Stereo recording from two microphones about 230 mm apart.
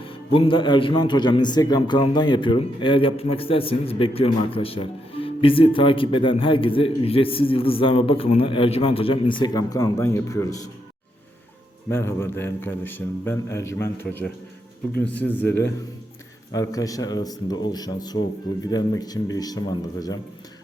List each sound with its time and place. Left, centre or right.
0.0 s a man's voice: left
11.9 s a man's voice: centre